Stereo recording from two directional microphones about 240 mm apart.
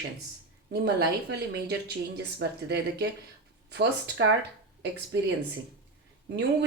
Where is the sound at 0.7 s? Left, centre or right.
Right.